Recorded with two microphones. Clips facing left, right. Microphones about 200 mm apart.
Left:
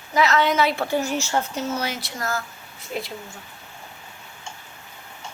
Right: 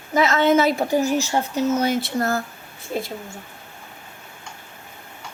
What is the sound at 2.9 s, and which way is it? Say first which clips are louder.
Speech: right 4 dB; 40° right (ahead or behind).